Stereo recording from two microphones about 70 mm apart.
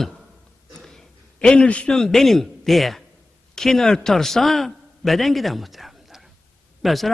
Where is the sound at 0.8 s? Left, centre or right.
Centre.